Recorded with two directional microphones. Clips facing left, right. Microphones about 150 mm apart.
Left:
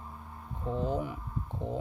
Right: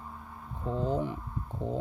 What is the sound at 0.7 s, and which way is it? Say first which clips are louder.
Speech: right 1 dB; 30° right (ahead or behind).